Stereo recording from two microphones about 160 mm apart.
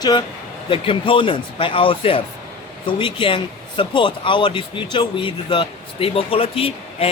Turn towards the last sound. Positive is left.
turn(degrees=35)  # may be behind; listen again after turning